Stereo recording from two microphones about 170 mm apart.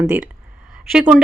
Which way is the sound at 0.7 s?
5° right (ahead or behind).